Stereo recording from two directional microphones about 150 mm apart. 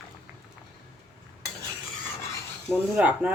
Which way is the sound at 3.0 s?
10° right (ahead or behind).